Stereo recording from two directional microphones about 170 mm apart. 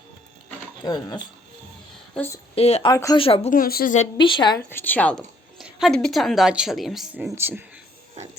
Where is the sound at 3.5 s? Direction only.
60° left (ahead or behind).